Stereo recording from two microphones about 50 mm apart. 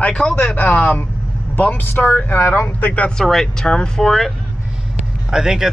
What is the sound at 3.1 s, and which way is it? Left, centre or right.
Speech, centre.